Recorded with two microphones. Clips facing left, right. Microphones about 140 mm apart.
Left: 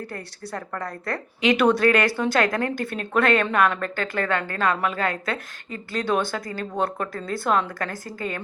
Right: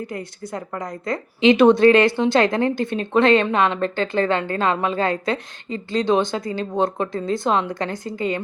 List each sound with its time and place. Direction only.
0.1 s a woman's voice: 15° right (ahead or behind)